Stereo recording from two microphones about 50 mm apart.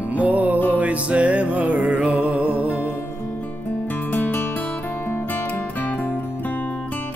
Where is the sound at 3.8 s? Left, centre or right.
Left.